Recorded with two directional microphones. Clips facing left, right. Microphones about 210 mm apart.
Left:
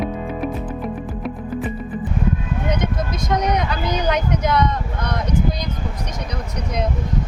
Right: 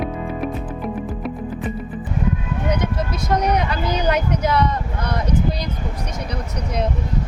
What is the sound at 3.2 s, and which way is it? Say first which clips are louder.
Speech: right 1 dB; 10° right (ahead or behind).